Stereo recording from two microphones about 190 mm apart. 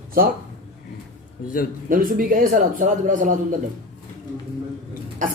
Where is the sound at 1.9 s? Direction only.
45° right (ahead or behind).